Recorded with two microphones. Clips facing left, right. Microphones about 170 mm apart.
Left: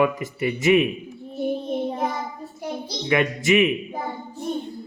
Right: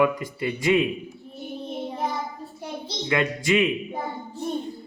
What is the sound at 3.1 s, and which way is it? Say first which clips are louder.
Speech: left 3 dB; 20° left (ahead or behind).